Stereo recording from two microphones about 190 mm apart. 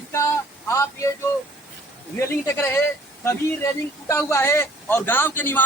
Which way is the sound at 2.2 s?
15° left (ahead or behind).